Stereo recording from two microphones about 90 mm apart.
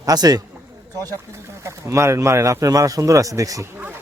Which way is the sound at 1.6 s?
35° right (ahead or behind).